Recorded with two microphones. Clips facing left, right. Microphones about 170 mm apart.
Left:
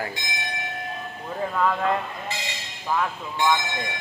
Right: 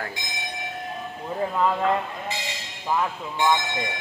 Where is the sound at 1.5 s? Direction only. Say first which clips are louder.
Even; 15° right (ahead or behind).